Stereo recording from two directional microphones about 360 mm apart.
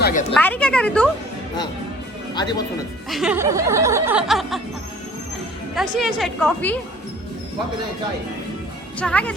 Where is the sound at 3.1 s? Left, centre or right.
Centre.